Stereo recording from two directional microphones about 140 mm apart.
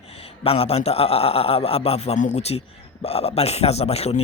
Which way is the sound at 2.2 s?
60° left (ahead or behind).